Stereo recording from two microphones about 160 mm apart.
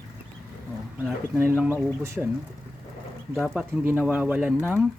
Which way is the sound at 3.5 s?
5° right (ahead or behind).